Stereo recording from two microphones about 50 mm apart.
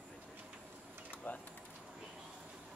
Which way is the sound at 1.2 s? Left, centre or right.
Left.